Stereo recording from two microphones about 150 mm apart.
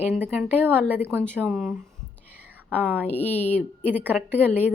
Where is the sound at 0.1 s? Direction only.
10° right (ahead or behind).